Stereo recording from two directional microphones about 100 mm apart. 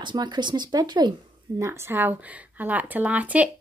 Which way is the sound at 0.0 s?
45° right (ahead or behind).